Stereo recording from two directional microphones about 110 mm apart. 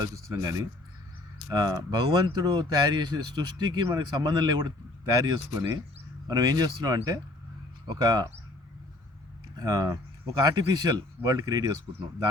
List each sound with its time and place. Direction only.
0.0 s speech: 30° right (ahead or behind)
9.6 s speech: 35° right (ahead or behind)